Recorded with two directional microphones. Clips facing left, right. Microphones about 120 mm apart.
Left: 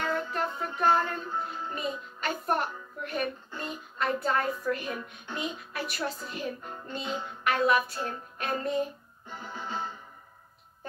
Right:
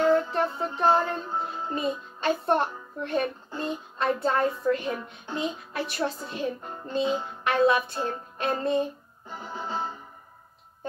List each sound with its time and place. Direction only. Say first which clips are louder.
0.1 s music: right 7 dB; 25° right (ahead or behind)